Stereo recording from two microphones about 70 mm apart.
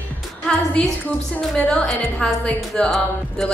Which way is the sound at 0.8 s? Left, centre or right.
Centre.